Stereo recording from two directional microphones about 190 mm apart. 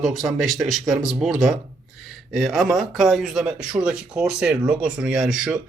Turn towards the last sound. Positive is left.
turn(degrees=-5)  # may be behind; listen again after turning